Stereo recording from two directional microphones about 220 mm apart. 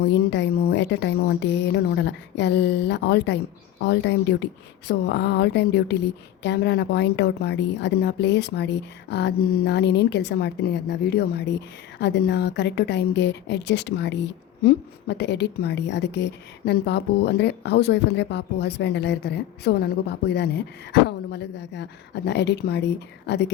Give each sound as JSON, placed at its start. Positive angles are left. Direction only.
{"t": 0.0, "sound": "speech", "side_deg": 50}